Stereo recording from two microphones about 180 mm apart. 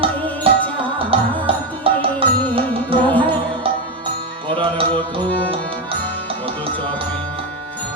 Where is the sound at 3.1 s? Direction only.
10° left (ahead or behind).